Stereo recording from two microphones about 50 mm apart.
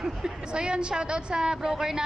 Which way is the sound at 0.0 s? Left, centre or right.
Centre.